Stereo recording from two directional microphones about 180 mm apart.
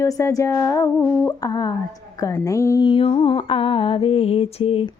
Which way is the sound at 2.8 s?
30° left (ahead or behind).